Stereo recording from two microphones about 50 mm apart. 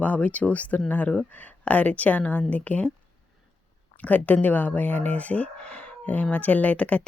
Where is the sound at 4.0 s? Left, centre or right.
Left.